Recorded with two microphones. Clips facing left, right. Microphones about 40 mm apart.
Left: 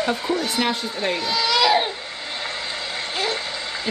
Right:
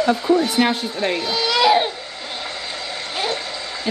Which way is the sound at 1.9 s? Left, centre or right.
Left.